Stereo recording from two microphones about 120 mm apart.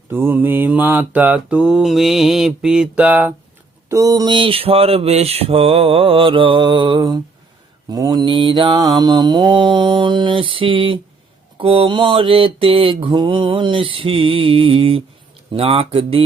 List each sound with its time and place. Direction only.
0.1 s mantra: 15° right (ahead or behind)
3.8 s mantra: 30° right (ahead or behind); by 16.2 s 50° right (ahead or behind)